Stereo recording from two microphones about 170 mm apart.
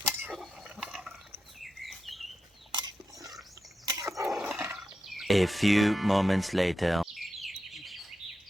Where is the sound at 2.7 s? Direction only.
25° right (ahead or behind).